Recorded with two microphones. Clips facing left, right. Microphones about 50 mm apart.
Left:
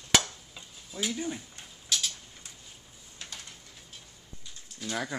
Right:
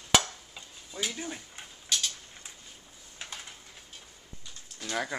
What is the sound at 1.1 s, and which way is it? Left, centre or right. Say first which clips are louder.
Speech: left 4 dB; centre.